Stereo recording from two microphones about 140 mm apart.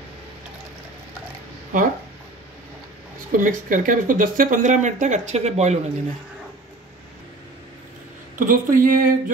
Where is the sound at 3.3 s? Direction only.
70° right (ahead or behind); by 5.8 s 50° right (ahead or behind).